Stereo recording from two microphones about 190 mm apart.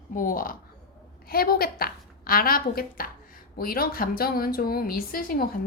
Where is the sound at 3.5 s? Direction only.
50° left (ahead or behind).